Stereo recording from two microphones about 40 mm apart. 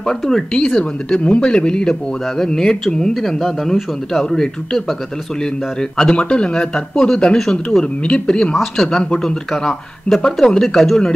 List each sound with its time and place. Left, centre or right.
0.6 s a man's voice: left
7.3 s speech: centre
7.8 s a man's voice: left; by 11.0 s centre